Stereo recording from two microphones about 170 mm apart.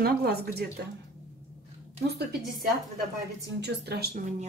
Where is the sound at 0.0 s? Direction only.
65° right (ahead or behind).